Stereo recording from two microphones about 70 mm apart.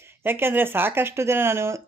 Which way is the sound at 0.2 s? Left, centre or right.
Right.